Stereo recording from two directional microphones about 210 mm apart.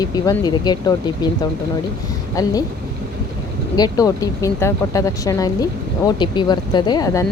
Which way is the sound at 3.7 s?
15° left (ahead or behind).